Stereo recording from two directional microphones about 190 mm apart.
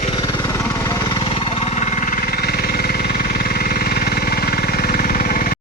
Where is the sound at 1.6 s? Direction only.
40° left (ahead or behind).